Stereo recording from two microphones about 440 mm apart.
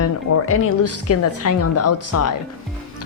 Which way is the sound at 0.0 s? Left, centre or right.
Left.